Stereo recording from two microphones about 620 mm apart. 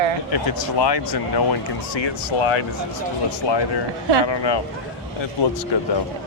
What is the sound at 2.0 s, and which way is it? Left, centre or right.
Speech, left.